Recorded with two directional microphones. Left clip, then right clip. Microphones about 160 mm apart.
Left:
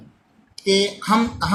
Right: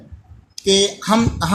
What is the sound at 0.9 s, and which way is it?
Speech, 55° right (ahead or behind).